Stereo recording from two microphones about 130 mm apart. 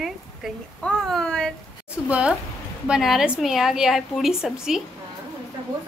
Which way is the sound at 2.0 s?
10° right (ahead or behind).